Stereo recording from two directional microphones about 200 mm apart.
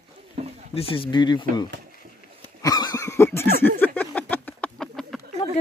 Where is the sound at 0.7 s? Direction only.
30° left (ahead or behind).